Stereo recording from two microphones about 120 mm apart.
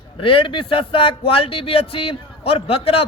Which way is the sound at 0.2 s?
45° left (ahead or behind).